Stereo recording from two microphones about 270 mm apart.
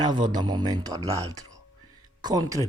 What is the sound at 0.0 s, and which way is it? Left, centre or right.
A man's voice, centre.